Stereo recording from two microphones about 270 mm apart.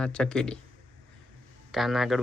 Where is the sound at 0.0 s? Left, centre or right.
Centre.